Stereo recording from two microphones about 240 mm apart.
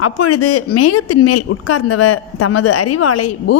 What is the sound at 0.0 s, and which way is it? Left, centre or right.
Speech, left.